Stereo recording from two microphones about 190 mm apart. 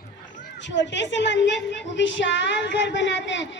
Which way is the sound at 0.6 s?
70° left (ahead or behind).